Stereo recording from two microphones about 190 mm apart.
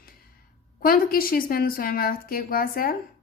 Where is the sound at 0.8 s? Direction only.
50° left (ahead or behind).